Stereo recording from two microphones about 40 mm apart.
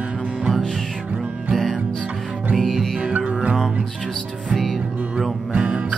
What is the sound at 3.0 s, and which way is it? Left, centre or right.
Music, right.